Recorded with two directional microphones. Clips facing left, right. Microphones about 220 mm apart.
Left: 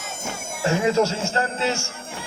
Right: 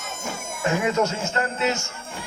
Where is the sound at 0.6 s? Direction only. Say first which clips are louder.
Left 3 dB; 30° left (ahead or behind).